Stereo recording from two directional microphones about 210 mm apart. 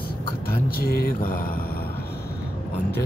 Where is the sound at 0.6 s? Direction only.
45° left (ahead or behind).